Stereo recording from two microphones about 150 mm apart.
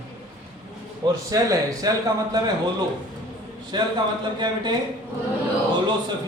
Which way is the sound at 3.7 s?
30° right (ahead or behind).